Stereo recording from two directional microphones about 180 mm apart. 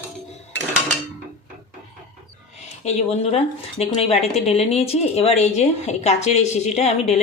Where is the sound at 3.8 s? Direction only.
35° left (ahead or behind).